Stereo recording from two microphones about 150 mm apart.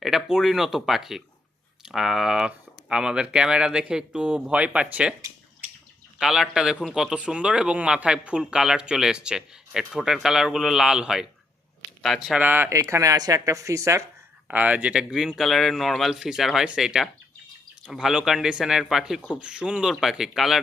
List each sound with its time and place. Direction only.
0.0 s a man's voice: 5° right (ahead or behind)
6.1 s a man's voice: 5° right (ahead or behind)